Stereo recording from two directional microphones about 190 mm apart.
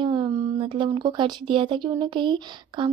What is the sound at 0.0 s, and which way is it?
A woman's voice, 25° right (ahead or behind).